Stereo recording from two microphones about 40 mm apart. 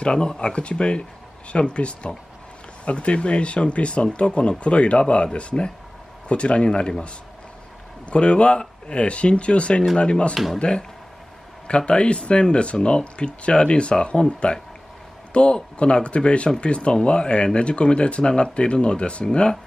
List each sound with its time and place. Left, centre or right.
0.0 s speech: left
8.1 s speech: left
10.3 s speech: centre
10.6 s speech: left